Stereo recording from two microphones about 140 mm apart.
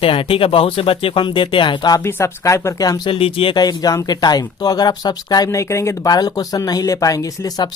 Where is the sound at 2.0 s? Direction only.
20° left (ahead or behind).